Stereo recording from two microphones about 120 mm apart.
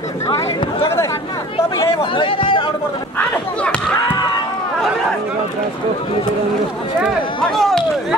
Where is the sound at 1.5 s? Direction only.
45° left (ahead or behind).